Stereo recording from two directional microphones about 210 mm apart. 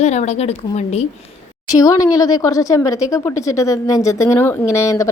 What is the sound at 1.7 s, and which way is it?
Speech, 15° left (ahead or behind).